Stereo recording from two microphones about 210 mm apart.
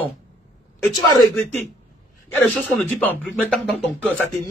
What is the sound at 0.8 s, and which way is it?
Speech, 20° left (ahead or behind).